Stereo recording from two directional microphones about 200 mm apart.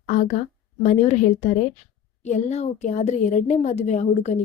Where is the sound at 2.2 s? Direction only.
35° left (ahead or behind).